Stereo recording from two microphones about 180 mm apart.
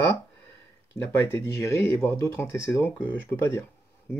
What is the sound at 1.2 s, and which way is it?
Speech, 15° left (ahead or behind).